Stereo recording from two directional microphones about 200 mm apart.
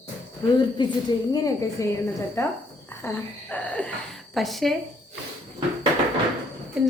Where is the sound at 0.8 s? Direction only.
20° left (ahead or behind).